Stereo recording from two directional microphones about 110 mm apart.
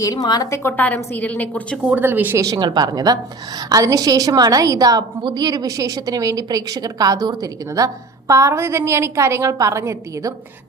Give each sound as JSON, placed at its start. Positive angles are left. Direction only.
{"t": 0.0, "sound": "a woman's voice", "side_deg": 35}
{"t": 0.5, "sound": "a woman's voice", "side_deg": 20}
{"t": 1.8, "sound": "a woman's voice", "side_deg": -15}
{"t": 2.4, "sound": "a woman's voice", "side_deg": -35}